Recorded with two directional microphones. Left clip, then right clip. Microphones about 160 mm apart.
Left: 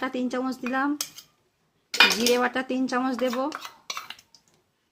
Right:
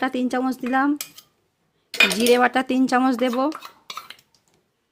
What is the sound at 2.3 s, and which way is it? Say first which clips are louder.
Speech: right 6 dB; 55° right (ahead or behind).